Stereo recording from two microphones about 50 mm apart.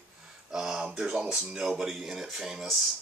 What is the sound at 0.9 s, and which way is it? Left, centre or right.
Speech, centre.